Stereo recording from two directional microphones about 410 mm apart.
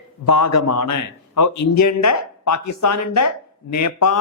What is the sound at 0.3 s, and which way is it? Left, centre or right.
A man's voice, left.